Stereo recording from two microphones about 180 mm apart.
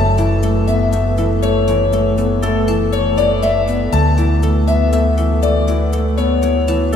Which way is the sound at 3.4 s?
Centre (ahead or behind).